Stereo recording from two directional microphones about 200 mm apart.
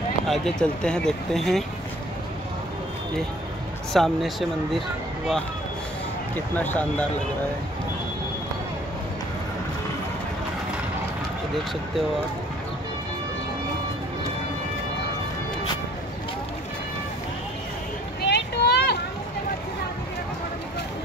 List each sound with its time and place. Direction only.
0.3 s speech: 5° left (ahead or behind)
3.9 s speech: centre (ahead or behind)
18.2 s vehicle: 55° left (ahead or behind)